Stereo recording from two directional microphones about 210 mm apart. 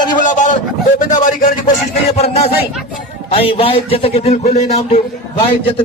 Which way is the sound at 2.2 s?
30° left (ahead or behind).